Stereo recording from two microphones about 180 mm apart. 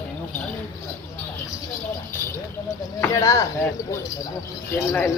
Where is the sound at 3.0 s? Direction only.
15° left (ahead or behind).